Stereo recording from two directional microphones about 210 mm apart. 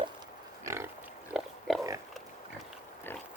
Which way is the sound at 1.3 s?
Centre (ahead or behind).